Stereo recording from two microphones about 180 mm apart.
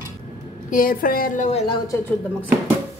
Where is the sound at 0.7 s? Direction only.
50° left (ahead or behind).